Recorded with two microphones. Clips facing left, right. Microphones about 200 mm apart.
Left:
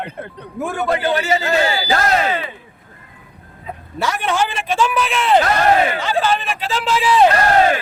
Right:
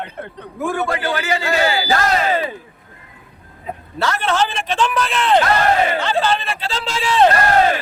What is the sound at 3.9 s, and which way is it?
Speech, 15° left (ahead or behind).